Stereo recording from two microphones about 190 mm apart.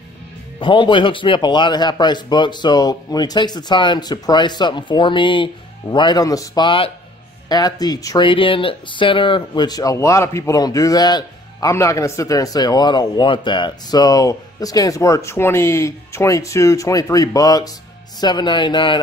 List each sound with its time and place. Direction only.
0.6 s speech: 25° left (ahead or behind)